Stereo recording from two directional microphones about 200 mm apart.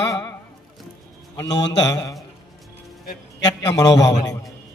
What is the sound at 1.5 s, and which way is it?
Speech, 60° left (ahead or behind).